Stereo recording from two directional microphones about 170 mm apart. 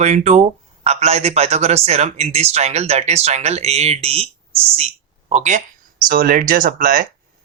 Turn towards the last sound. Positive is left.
turn(degrees=-55)  # may be behind; listen again after turning